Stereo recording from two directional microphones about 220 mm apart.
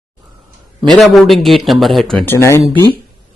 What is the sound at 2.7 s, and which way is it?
Speech, 20° right (ahead or behind).